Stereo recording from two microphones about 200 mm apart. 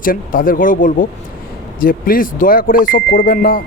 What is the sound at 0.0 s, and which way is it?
Speech, 45° left (ahead or behind).